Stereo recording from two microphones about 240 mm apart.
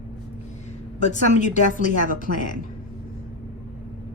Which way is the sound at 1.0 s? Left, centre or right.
Left.